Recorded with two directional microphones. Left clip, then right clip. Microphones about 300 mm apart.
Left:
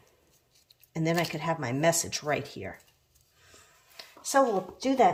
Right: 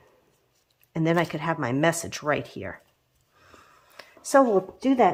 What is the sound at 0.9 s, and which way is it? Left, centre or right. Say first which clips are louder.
Speech: right 5 dB; centre.